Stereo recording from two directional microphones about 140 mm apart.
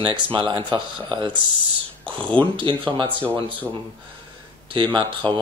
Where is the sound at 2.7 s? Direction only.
40° right (ahead or behind).